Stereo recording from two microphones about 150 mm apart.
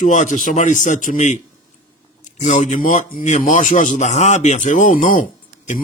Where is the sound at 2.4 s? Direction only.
55° left (ahead or behind).